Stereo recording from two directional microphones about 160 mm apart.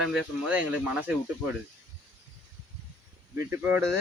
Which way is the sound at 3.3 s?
15° right (ahead or behind).